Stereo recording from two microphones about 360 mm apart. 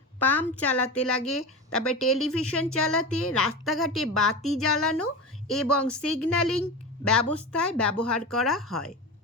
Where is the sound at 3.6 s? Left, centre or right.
Centre.